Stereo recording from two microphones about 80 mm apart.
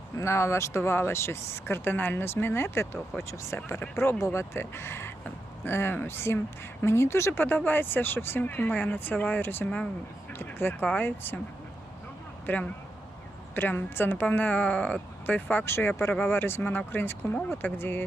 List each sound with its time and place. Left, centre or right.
0.2 s speech: left
9.6 s speech: centre
10.3 s speech: left
12.5 s speech: centre